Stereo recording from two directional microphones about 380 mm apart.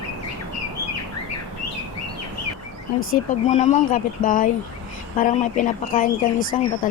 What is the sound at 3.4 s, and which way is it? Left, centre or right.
Speech, centre.